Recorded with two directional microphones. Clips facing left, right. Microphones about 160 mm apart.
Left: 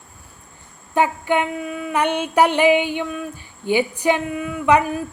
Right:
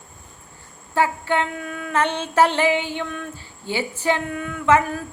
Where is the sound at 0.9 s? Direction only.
15° left (ahead or behind).